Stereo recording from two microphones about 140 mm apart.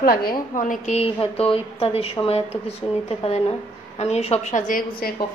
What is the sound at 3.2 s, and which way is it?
A woman's voice, 50° left (ahead or behind).